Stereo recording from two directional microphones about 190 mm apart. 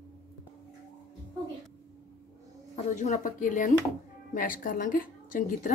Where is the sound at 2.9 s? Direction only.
40° left (ahead or behind).